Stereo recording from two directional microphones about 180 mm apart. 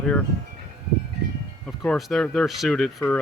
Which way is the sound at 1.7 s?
Centre (ahead or behind).